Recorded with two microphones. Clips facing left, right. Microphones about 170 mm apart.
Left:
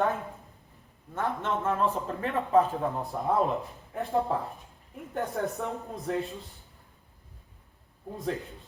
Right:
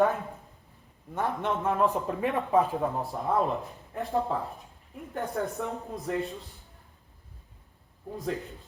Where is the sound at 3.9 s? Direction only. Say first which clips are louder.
Left 1 dB; centre (ahead or behind).